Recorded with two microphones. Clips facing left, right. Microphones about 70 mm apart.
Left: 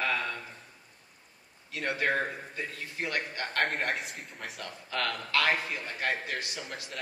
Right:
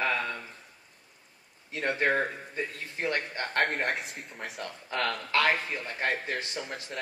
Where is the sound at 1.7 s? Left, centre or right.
Right.